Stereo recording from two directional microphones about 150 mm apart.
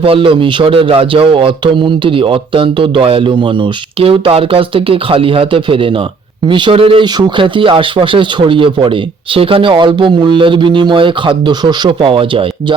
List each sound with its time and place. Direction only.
0.0 s speech: 35° right (ahead or behind)